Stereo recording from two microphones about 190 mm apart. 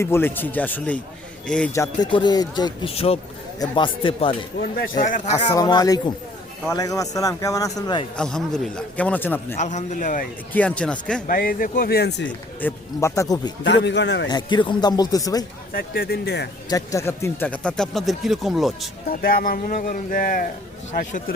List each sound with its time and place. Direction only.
0.0 s a man's voice: 10° left (ahead or behind)
1.7 s speech: 20° left (ahead or behind)
4.8 s speech: 45° left (ahead or behind)
5.5 s a man's voice: 25° left (ahead or behind)
8.1 s a man's voice: 5° left (ahead or behind)
9.6 s a man's voice: 40° left (ahead or behind)
10.5 s a man's voice: 5° left (ahead or behind)
11.3 s speech: 50° left (ahead or behind)
12.5 s a man's voice: 10° left (ahead or behind)
13.7 s a man's voice: 65° left (ahead or behind)
14.3 s speech: 25° left (ahead or behind)
15.7 s speech: 55° left (ahead or behind)
16.6 s speech: 15° left (ahead or behind); by 18.9 s centre (ahead or behind)
19.1 s speech: 45° left (ahead or behind)